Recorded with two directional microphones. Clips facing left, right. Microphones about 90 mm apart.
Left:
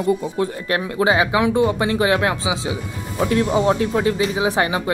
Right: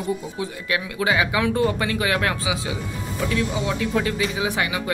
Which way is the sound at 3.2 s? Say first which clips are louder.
Left 7 dB; 40° left (ahead or behind).